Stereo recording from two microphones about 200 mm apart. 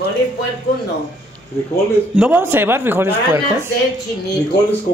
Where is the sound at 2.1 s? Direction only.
5° right (ahead or behind).